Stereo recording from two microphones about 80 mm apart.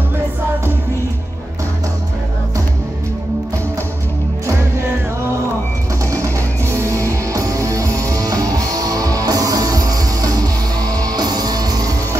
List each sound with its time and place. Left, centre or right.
6.0 s music: right